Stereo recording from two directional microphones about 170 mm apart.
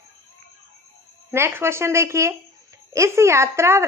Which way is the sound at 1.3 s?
15° right (ahead or behind).